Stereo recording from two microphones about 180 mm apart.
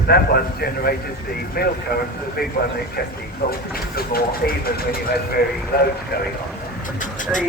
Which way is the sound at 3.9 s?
55° left (ahead or behind).